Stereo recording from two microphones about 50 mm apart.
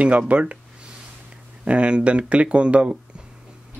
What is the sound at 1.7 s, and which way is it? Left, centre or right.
Speech, right.